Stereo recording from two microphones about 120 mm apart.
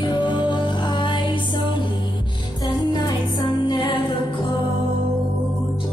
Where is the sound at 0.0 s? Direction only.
40° left (ahead or behind).